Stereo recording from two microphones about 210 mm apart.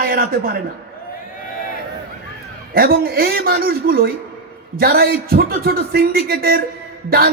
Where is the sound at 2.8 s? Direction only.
45° right (ahead or behind).